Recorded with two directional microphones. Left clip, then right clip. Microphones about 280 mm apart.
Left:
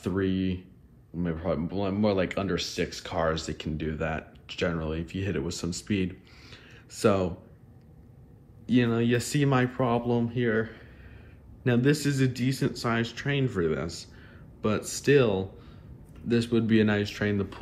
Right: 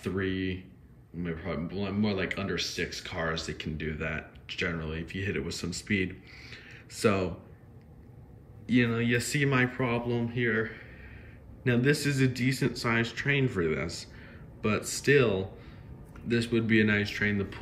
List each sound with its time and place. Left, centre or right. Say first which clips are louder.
0.0 s speech: left 3 dB; centre
6.5 s a sound: left 1 dB; centre
8.6 s a man's voice: left 2 dB; centre